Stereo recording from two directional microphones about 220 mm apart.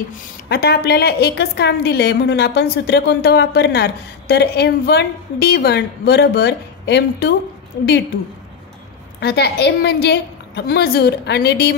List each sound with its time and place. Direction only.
0.5 s a woman's voice: 45° left (ahead or behind)
9.2 s a woman's voice: 50° left (ahead or behind)